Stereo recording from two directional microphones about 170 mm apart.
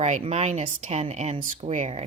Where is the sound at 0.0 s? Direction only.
40° right (ahead or behind).